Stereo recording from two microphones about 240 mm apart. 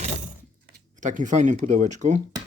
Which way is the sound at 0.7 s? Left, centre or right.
Right.